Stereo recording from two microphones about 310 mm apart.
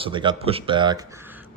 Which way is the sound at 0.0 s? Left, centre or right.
Centre.